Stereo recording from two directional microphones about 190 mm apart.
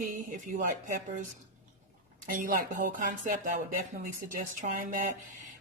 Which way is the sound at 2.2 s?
50° right (ahead or behind).